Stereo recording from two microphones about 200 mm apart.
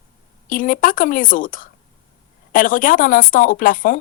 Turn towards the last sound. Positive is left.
turn(degrees=45)  # may be behind; listen again after turning